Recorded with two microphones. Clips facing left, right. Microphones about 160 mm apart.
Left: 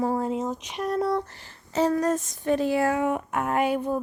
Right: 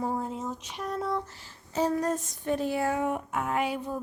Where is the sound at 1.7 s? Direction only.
80° left.